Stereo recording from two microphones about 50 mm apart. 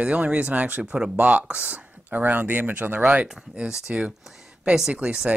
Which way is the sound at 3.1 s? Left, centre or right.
Right.